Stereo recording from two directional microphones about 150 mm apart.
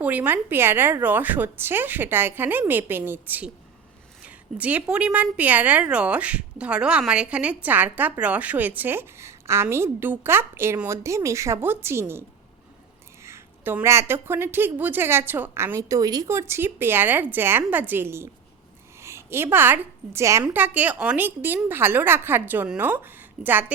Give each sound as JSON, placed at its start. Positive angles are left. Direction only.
{"t": 0.0, "sound": "a woman's voice", "side_deg": -10}
{"t": 13.2, "sound": "a woman's voice", "side_deg": -15}